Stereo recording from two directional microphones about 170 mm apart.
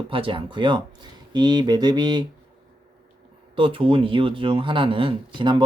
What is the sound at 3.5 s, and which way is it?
Speech, 30° right (ahead or behind).